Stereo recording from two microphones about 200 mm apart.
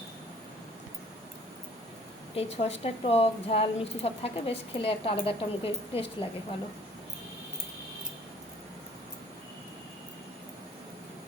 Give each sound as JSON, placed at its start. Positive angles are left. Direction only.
{"t": 2.3, "sound": "a woman's voice", "side_deg": 30}